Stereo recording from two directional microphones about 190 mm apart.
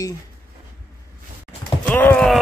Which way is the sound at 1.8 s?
10° left (ahead or behind).